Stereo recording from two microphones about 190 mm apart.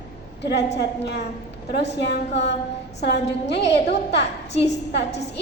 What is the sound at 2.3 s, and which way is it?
A woman's voice, 65° left (ahead or behind).